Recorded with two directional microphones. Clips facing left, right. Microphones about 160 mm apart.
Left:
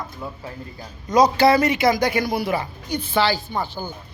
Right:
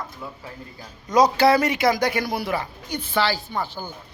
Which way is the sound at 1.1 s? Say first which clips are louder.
Left 1 dB; 5° right (ahead or behind).